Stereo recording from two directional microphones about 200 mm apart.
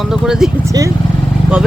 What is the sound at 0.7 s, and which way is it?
Speech, 15° right (ahead or behind).